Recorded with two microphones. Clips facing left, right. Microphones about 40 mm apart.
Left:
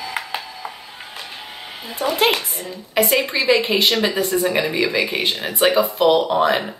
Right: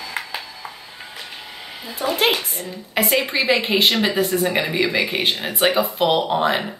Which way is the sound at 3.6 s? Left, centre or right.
Right.